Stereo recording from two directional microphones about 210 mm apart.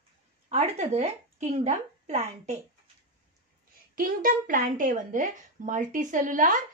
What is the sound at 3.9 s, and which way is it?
Speech, 40° right (ahead or behind).